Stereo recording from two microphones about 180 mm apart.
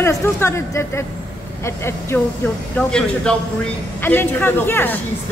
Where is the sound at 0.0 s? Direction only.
15° left (ahead or behind).